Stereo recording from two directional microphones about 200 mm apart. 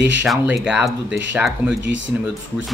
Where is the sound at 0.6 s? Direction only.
5° right (ahead or behind).